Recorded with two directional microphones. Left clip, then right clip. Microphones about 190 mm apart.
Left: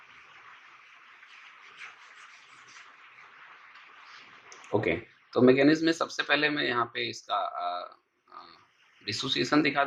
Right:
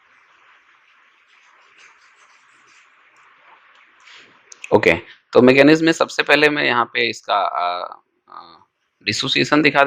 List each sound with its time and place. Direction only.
4.4 s speech: 45° right (ahead or behind)